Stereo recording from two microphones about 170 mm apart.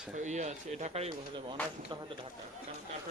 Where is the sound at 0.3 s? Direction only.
45° right (ahead or behind).